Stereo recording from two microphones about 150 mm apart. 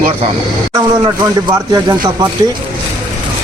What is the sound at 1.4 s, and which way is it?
Speech, 25° right (ahead or behind).